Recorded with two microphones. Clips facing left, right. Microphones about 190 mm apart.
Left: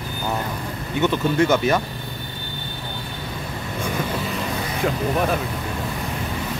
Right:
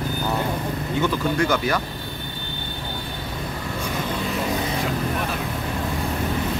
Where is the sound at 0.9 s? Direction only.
25° left (ahead or behind).